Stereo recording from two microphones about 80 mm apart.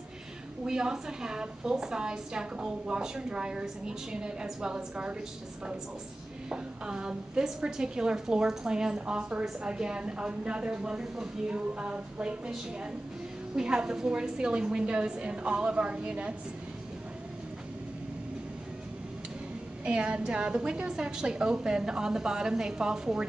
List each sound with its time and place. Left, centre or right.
0.7 s a woman's voice: centre
6.5 s a woman's voice: centre
13.6 s a woman's voice: centre
19.8 s a woman's voice: centre